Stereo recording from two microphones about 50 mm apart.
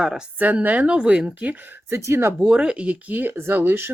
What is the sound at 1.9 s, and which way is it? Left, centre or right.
Speech, right.